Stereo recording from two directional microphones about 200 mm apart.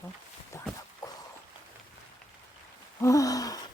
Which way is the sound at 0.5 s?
15° left (ahead or behind).